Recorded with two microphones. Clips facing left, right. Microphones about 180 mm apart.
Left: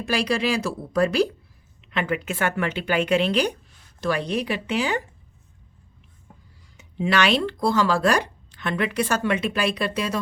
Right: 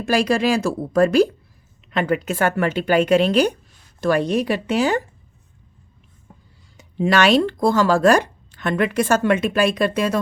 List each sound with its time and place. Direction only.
0.0 s speech: 45° right (ahead or behind)
6.7 s speech: 45° right (ahead or behind)